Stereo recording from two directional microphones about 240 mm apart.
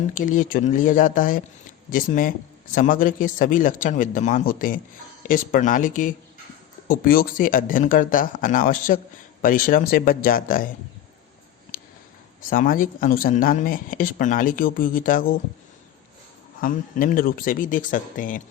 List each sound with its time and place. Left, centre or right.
0.1 s speech: left
12.5 s speech: left
16.6 s speech: left